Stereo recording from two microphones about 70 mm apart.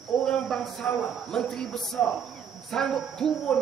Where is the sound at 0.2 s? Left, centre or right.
Centre.